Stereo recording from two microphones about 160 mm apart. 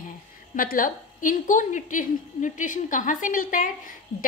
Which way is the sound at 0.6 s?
60° left (ahead or behind).